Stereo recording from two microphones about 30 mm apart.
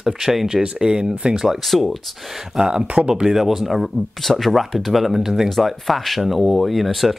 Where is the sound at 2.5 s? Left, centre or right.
Right.